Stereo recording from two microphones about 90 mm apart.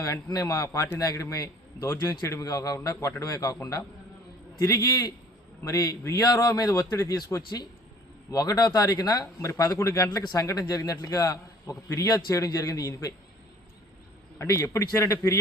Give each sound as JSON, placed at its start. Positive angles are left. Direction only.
{"t": 0.0, "sound": "a man's voice", "side_deg": 40}
{"t": 10.1, "sound": "a man's voice", "side_deg": 45}
{"t": 14.3, "sound": "a man's voice", "side_deg": 35}